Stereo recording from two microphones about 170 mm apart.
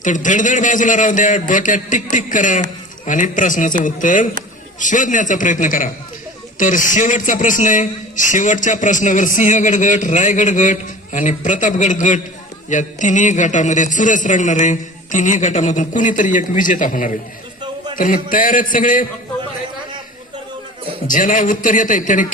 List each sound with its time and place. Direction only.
0.0 s a man's voice: 50° left (ahead or behind)
21.1 s a man's voice: 50° left (ahead or behind)